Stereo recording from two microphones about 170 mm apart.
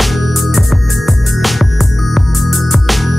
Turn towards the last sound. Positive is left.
turn(degrees=0)  # may be behind; listen again after turning